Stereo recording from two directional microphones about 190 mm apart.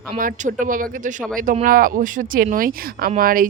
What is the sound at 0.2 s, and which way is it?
A woman's voice, 45° right (ahead or behind).